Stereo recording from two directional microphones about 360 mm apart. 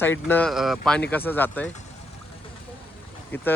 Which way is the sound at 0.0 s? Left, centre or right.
Centre.